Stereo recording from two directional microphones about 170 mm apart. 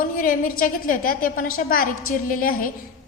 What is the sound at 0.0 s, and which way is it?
A woman's voice, 55° left (ahead or behind).